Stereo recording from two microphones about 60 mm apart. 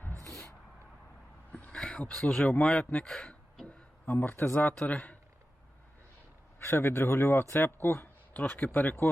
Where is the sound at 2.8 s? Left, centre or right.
Left.